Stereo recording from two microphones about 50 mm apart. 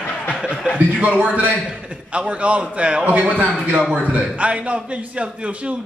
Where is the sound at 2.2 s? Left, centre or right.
Right.